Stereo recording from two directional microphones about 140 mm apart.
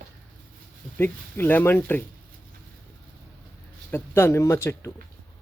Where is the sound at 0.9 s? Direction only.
15° left (ahead or behind).